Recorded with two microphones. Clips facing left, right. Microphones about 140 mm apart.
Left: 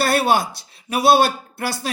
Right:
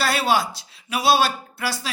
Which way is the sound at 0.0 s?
55° left (ahead or behind).